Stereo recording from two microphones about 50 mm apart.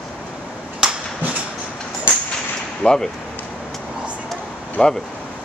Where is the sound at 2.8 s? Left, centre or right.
Left.